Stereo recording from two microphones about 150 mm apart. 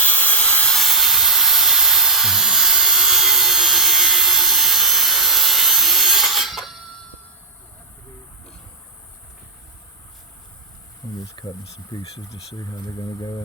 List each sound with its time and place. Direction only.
0.0 s sawing: 10° left (ahead or behind)
11.3 s speech: 30° left (ahead or behind)